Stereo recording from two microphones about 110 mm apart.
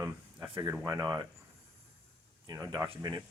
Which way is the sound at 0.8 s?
35° right (ahead or behind).